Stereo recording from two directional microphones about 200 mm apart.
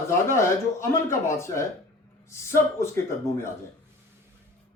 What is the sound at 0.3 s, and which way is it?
Speech, 15° left (ahead or behind).